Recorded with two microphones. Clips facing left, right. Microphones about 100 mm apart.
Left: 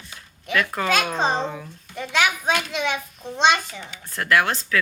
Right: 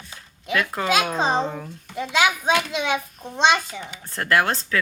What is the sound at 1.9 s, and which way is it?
Speech, 20° right (ahead or behind).